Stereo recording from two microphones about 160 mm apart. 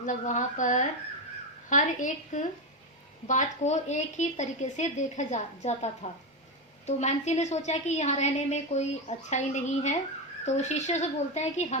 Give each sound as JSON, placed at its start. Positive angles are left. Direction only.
{"t": 0.0, "sound": "a woman's voice", "side_deg": 50}